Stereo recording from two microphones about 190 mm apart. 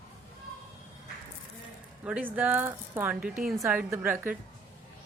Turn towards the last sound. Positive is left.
turn(degrees=-10)  # may be behind; listen again after turning